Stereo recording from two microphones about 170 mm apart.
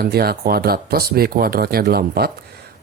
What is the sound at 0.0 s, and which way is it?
Speech, 65° right (ahead or behind).